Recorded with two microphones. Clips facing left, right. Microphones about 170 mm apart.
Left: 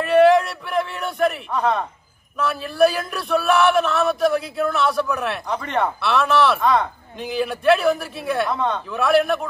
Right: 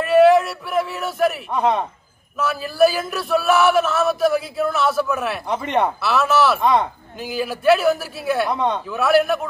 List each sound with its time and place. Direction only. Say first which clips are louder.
0.0 s a sound: right 1 dB; centre (ahead or behind)
1.5 s a man's voice: right 2 dB; 20° right (ahead or behind)
2.3 s speech: right 1 dB; centre (ahead or behind)
5.5 s speech: right 3 dB; 20° right (ahead or behind)
5.9 s speech: even; centre (ahead or behind)
6.6 s speech: right 1 dB; 20° right (ahead or behind)
7.2 s speech: left 1 dB; 5° right (ahead or behind)
8.5 s a man's voice: right 2 dB; 20° right (ahead or behind)
8.9 s speech: right 1 dB; 5° right (ahead or behind)